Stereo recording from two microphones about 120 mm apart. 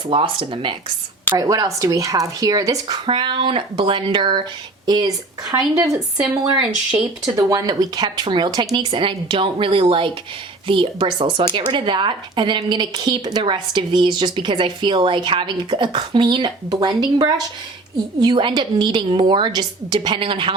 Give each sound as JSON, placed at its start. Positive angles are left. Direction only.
{"t": 0.1, "sound": "speech", "side_deg": -50}
{"t": 1.3, "sound": "speech", "side_deg": -30}
{"t": 3.1, "sound": "a woman's voice", "side_deg": -40}
{"t": 7.3, "sound": "a woman's voice", "side_deg": -30}